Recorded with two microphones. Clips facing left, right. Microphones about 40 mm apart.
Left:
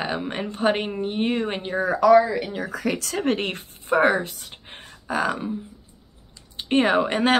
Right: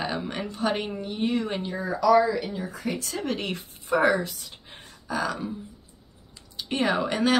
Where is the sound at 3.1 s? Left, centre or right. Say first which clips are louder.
Left 5 dB; left.